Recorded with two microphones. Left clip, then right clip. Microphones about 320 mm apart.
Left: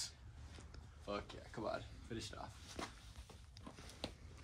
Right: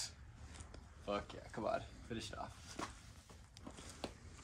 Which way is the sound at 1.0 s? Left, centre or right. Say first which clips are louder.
Right 4 dB; right.